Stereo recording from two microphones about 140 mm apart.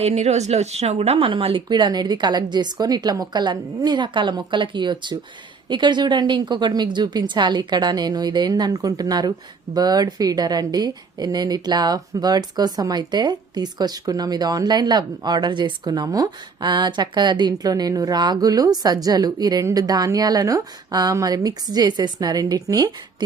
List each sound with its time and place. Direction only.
0.0 s a woman's voice: 50° right (ahead or behind); by 22.9 s 25° right (ahead or behind)